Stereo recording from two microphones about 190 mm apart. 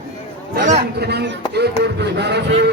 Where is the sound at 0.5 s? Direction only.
45° right (ahead or behind).